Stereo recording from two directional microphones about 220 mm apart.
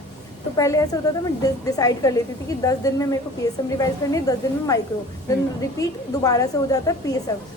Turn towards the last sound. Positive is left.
turn(degrees=15)  # may be behind; listen again after turning